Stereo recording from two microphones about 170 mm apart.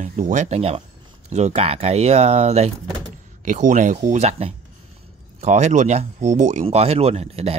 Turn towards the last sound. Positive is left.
turn(degrees=-35)  # may be behind; listen again after turning